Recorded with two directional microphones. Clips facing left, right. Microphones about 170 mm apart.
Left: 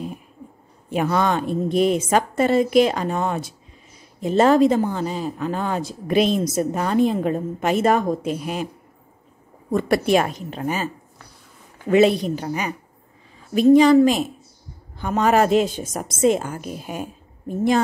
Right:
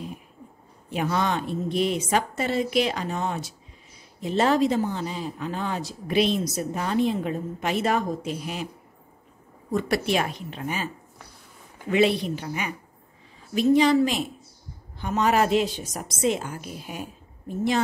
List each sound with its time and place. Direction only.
0.8 s speech: 50° left (ahead or behind)
9.7 s speech: 50° left (ahead or behind)
11.9 s a woman's voice: 45° left (ahead or behind)